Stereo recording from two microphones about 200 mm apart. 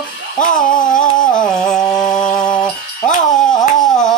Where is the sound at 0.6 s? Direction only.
40° left (ahead or behind).